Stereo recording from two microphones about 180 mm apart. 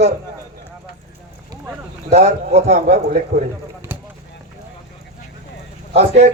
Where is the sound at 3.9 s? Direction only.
15° right (ahead or behind).